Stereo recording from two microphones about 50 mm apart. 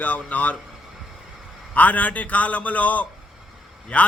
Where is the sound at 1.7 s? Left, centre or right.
Left.